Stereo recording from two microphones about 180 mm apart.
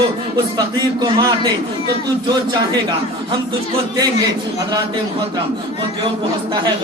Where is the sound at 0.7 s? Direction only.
25° right (ahead or behind).